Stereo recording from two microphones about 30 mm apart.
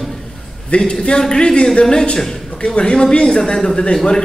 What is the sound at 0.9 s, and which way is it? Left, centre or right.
A man's voice, left.